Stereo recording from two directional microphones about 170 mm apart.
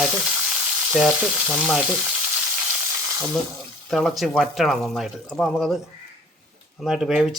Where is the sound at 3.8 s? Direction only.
Centre (ahead or behind).